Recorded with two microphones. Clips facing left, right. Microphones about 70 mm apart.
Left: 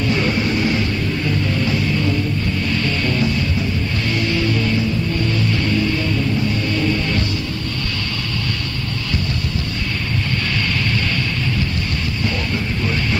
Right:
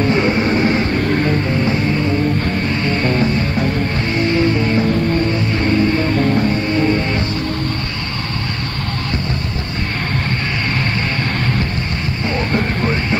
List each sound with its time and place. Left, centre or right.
0.0 s vehicle: right
1.0 s music: right
2.7 s music: right
6.7 s music: right